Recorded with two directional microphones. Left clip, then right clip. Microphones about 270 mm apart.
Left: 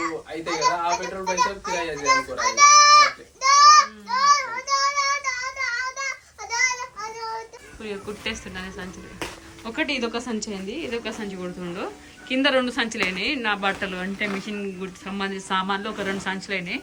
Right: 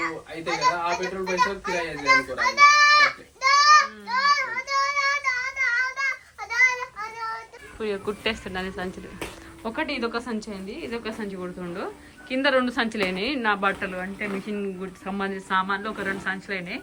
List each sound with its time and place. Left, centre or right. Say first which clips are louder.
0.6 s a child's voice: left 1 dB; left
2.4 s goat: left 3 dB; left
4.4 s child singing: left 1 dB; left
7.8 s speech: right 5 dB; centre